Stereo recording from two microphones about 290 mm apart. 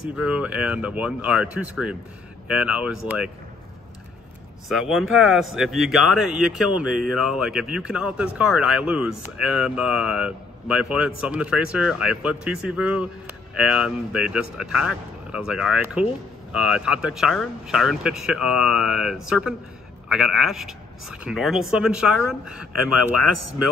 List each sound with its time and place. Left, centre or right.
0.0 s speech: centre
4.6 s speech: centre